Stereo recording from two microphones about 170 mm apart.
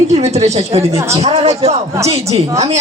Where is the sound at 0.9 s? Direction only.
20° right (ahead or behind).